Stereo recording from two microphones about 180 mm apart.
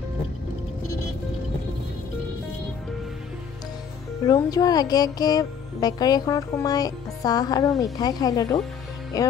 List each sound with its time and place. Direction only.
4.3 s speech: 20° left (ahead or behind)